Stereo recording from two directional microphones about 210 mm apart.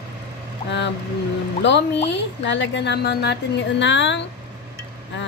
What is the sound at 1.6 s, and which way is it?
A woman's voice, 55° left (ahead or behind).